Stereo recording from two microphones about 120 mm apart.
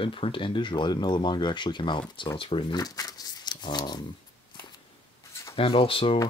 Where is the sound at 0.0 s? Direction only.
45° left (ahead or behind).